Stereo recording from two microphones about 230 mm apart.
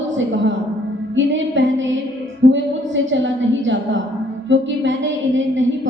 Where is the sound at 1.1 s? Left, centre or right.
Right.